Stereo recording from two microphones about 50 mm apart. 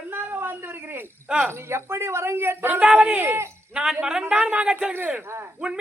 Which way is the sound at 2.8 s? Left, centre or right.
Right.